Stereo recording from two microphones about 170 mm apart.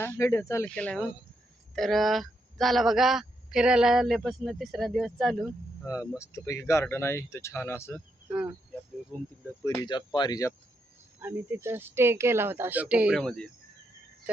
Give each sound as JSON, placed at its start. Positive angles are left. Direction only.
{"t": 0.0, "sound": "speech", "side_deg": 15}
{"t": 0.7, "sound": "speech", "side_deg": 5}
{"t": 6.1, "sound": "speech", "side_deg": 15}
{"t": 8.3, "sound": "speech", "side_deg": -10}
{"t": 9.6, "sound": "speech", "side_deg": 25}
{"t": 11.2, "sound": "speech", "side_deg": -15}
{"t": 13.1, "sound": "speech", "side_deg": 5}